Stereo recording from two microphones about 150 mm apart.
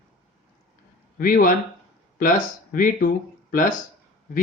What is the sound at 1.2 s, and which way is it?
Speech, 65° left (ahead or behind).